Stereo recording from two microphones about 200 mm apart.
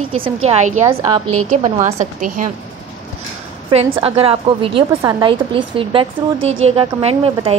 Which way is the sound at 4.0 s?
30° right (ahead or behind).